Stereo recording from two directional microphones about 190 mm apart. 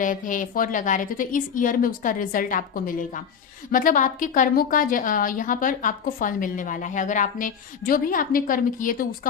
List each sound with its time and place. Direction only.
0.0 s a woman's voice: 45° left (ahead or behind)